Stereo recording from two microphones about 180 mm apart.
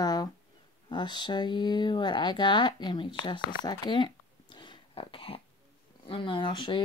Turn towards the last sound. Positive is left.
turn(degrees=25)  # may be behind; listen again after turning